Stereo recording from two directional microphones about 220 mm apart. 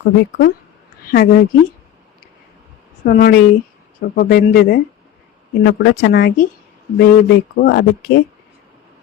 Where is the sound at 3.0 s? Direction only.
45° left (ahead or behind).